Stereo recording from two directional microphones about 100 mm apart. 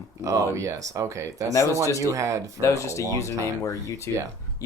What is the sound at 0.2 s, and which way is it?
Speech, 35° right (ahead or behind).